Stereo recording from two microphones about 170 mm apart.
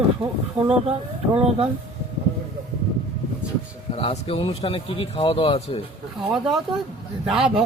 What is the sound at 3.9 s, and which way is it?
A man's voice, 35° left (ahead or behind).